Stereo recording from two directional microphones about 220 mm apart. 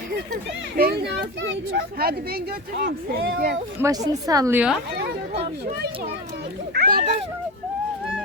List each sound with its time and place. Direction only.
0.8 s speech: 45° right (ahead or behind)
3.8 s a woman's voice: 15° right (ahead or behind)
4.9 s speech: 45° right (ahead or behind)
6.7 s speech: 40° right (ahead or behind)